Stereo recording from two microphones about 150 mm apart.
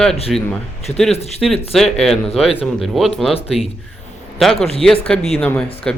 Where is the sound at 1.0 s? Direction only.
45° left (ahead or behind).